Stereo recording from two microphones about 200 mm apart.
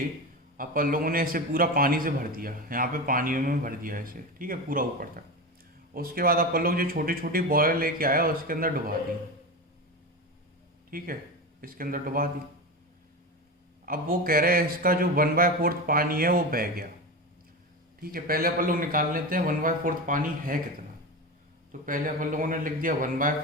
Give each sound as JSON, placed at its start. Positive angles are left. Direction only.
{"t": 0.5, "sound": "a man's voice", "side_deg": -45}
{"t": 10.9, "sound": "a man's voice", "side_deg": -45}
{"t": 13.8, "sound": "a man's voice", "side_deg": -45}
{"t": 18.0, "sound": "a man's voice", "side_deg": -45}
{"t": 21.7, "sound": "a man's voice", "side_deg": -40}